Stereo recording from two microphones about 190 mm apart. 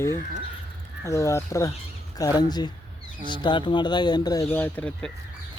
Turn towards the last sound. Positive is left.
turn(degrees=5)  # may be behind; listen again after turning